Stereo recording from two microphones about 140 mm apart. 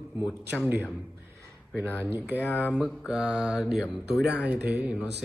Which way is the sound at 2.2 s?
15° left (ahead or behind).